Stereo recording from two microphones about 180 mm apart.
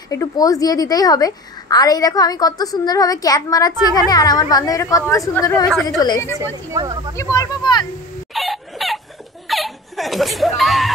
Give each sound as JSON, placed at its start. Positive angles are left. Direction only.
{"t": 0.1, "sound": "a woman's voice", "side_deg": 20}
{"t": 6.7, "sound": "speech", "side_deg": -20}
{"t": 7.3, "sound": "a woman's voice", "side_deg": 25}
{"t": 8.3, "sound": "chicken", "side_deg": 0}
{"t": 9.5, "sound": "speech", "side_deg": 0}